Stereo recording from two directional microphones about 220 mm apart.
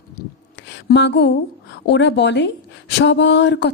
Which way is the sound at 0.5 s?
55° left (ahead or behind).